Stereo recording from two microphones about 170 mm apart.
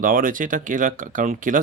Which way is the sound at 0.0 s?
50° right (ahead or behind).